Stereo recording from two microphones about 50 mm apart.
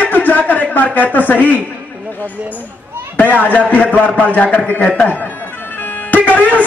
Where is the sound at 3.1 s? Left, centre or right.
Left.